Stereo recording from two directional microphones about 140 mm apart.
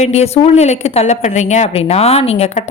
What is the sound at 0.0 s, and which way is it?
Speech, 50° left (ahead or behind).